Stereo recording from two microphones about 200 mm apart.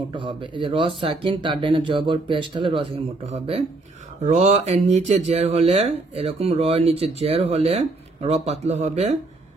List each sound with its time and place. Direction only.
0.1 s speech: 25° right (ahead or behind)